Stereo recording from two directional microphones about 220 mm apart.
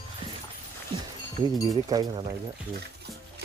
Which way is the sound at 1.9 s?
20° right (ahead or behind).